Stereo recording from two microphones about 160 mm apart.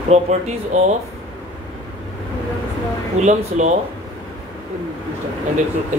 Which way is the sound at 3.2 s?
50° right (ahead or behind).